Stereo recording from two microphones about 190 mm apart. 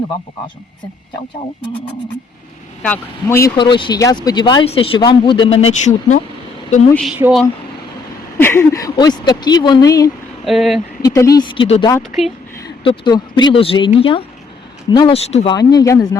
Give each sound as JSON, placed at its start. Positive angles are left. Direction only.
{"t": 2.8, "sound": "speech", "side_deg": 10}
{"t": 3.6, "sound": "speech", "side_deg": 25}
{"t": 7.2, "sound": "speech", "side_deg": -5}
{"t": 8.4, "sound": "speech", "side_deg": 10}
{"t": 10.4, "sound": "speech", "side_deg": 0}
{"t": 11.0, "sound": "speech", "side_deg": 20}
{"t": 15.3, "sound": "speech", "side_deg": 35}
{"t": 15.5, "sound": "speech", "side_deg": 20}